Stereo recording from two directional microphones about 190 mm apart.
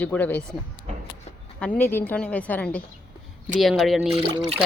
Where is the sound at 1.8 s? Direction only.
10° left (ahead or behind).